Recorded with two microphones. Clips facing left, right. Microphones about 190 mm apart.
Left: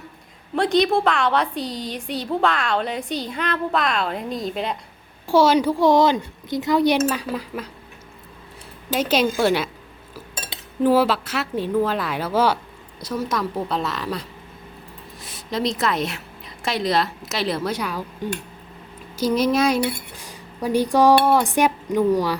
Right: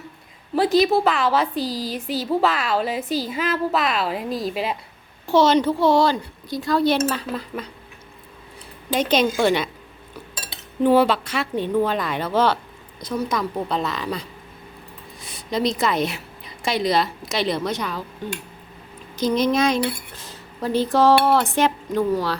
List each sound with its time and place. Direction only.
0.5 s a woman's voice: 5° right (ahead or behind)
5.3 s a woman's voice: 10° left (ahead or behind)
8.9 s a woman's voice: 5° left (ahead or behind)
10.8 s a woman's voice: 5° left (ahead or behind)